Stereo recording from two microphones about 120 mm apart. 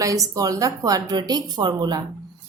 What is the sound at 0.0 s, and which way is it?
Speech, 30° right (ahead or behind).